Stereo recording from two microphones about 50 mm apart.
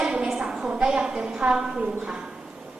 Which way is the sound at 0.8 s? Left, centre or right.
Centre.